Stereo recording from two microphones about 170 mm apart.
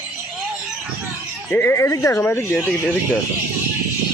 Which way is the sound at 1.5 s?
10° left (ahead or behind).